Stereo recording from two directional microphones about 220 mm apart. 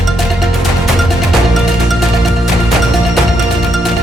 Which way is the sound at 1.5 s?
Centre (ahead or behind).